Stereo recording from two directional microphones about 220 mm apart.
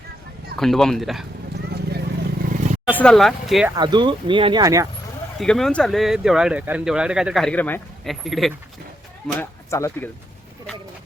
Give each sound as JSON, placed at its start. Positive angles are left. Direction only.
{"t": 0.6, "sound": "speech", "side_deg": 0}
{"t": 2.4, "sound": "vehicle", "side_deg": -40}
{"t": 2.8, "sound": "speech", "side_deg": 5}
{"t": 3.8, "sound": "speech", "side_deg": -20}
{"t": 5.4, "sound": "speech", "side_deg": 0}
{"t": 9.2, "sound": "speech", "side_deg": 10}